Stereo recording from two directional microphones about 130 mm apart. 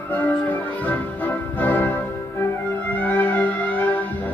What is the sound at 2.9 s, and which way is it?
Music, 15° left (ahead or behind).